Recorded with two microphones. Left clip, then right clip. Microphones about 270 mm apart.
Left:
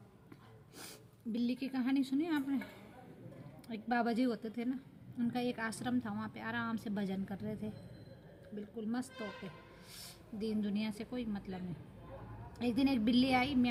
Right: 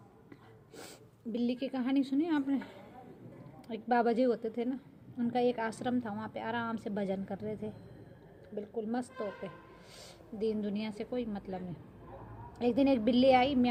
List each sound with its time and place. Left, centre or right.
1.3 s a woman's voice: centre
3.7 s a woman's voice: centre